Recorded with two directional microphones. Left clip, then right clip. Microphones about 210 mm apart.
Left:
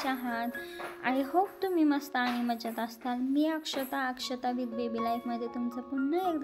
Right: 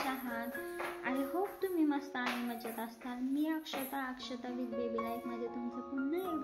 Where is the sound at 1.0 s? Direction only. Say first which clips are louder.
Left 9 dB; 55° left (ahead or behind).